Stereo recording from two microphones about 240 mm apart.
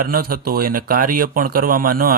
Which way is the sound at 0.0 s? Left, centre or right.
Right.